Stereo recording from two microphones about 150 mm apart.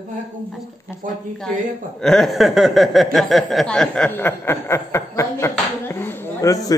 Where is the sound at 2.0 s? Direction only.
Centre (ahead or behind).